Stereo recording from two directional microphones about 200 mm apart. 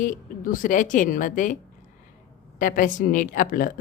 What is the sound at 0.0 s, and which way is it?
A woman's voice, 40° left (ahead or behind).